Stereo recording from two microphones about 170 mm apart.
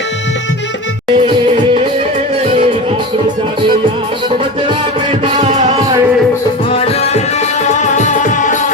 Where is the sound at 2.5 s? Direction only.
35° right (ahead or behind).